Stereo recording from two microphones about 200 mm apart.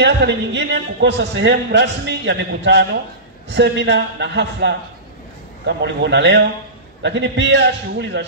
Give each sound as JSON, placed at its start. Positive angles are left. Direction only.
{"t": 0.0, "sound": "a man's voice", "side_deg": -60}